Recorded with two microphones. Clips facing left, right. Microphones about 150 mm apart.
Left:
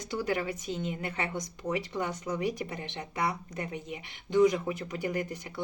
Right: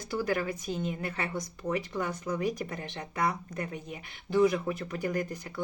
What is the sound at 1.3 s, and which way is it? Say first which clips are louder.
Speech: right 1 dB; 5° right (ahead or behind).